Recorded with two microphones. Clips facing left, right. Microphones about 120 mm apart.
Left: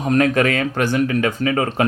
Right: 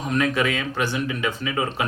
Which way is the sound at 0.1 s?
50° left (ahead or behind).